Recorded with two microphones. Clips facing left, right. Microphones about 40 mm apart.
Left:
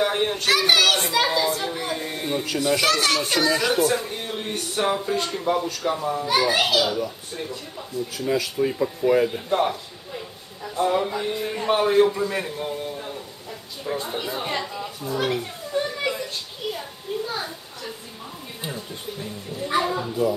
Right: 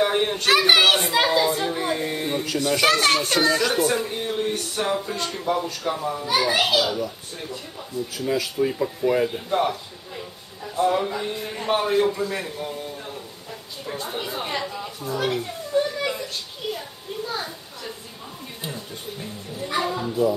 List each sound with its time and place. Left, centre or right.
0.0 s children playing: centre
0.5 s a child's voice: right
1.1 s children playing: centre
2.9 s a child's voice: right
3.3 s speech: centre
12.9 s a sound: centre
13.8 s chatter: centre
15.3 s a sound: centre
19.1 s music: centre